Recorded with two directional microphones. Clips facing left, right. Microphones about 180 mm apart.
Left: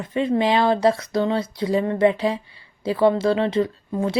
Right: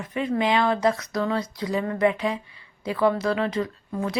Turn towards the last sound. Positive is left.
turn(degrees=30)  # may be behind; listen again after turning